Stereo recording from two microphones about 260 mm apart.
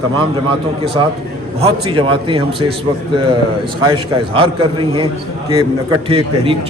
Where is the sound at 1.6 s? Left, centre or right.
Centre.